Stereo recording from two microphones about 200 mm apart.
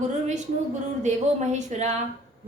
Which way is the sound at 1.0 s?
35° right (ahead or behind).